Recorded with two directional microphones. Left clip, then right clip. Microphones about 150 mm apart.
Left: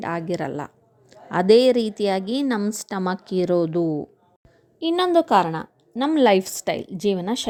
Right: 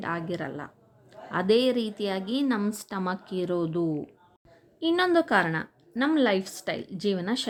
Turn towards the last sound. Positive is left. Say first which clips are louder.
# left 5 dB
turn(degrees=30)  # may be behind; listen again after turning